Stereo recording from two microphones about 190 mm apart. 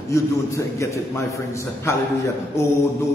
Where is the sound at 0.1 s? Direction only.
15° left (ahead or behind).